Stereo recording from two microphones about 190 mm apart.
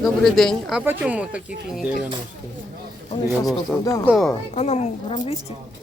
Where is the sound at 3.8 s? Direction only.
20° left (ahead or behind).